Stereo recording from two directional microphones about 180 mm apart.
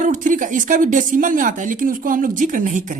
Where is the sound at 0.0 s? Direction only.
45° right (ahead or behind).